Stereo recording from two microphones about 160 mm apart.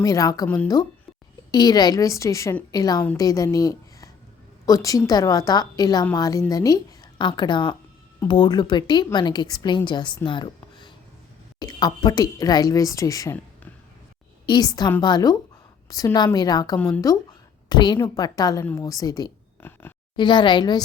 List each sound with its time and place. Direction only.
0.0 s speech: 20° left (ahead or behind)
0.4 s speech: 10° left (ahead or behind)
1.5 s a woman's voice: 25° left (ahead or behind)
10.2 s a sound: 30° left (ahead or behind)
11.6 s speech: 25° left (ahead or behind)
14.4 s speech: 25° left (ahead or behind)
16.7 s speech: 10° left (ahead or behind)
17.7 s speech: 25° left (ahead or behind)
19.6 s speech: 15° left (ahead or behind)
20.1 s speech: 30° left (ahead or behind)